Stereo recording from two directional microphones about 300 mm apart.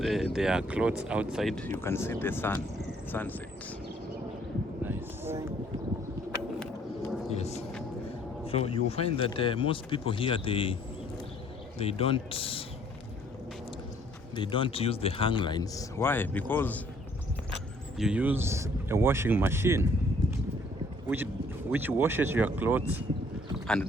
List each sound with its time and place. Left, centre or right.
0.0 s speech: centre
4.8 s a sound: centre
7.3 s music: left
8.4 s speech: centre
11.8 s speech: centre
14.3 s speech: centre
21.7 s speech: centre